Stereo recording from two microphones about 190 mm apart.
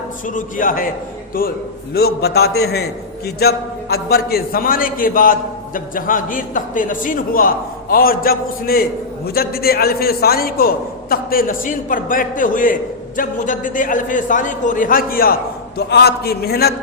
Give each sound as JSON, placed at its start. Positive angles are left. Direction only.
{"t": 0.3, "sound": "a man's voice", "side_deg": 45}